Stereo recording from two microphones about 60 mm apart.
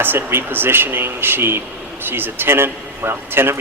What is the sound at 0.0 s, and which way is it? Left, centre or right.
A man's voice, right.